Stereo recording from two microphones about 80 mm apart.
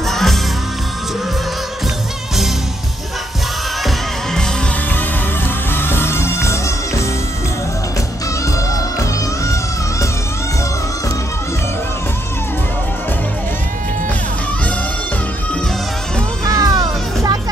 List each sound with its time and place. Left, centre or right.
0.0 s music: centre
3.8 s music: centre
5.7 s music: left
16.4 s music: right